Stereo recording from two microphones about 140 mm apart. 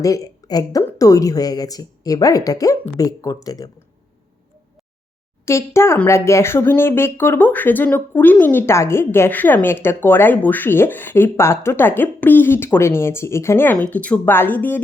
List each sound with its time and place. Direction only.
0.0 s a woman's voice: 25° left (ahead or behind)
5.5 s a woman's voice: 20° left (ahead or behind)